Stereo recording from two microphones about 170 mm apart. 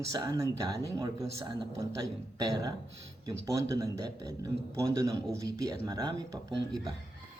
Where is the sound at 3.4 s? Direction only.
20° right (ahead or behind).